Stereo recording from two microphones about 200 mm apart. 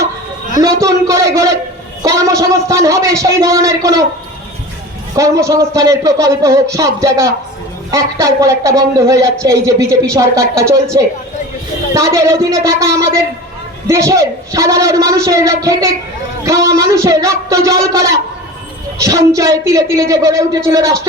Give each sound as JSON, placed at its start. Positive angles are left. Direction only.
{"t": 0.6, "sound": "a man's voice", "side_deg": -15}
{"t": 5.1, "sound": "a man's voice", "side_deg": -15}